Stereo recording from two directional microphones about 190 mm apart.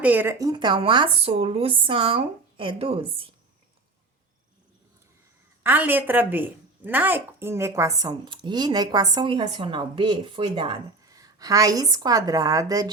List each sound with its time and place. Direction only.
0.0 s speech: 10° right (ahead or behind); by 3.2 s 30° right (ahead or behind)
5.6 s speech: 10° right (ahead or behind)